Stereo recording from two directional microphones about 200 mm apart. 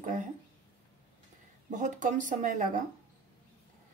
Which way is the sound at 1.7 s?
40° right (ahead or behind).